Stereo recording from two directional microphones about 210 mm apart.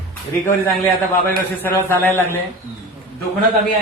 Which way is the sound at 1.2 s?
10° left (ahead or behind).